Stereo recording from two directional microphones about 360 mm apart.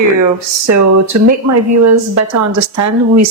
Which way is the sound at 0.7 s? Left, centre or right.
Right.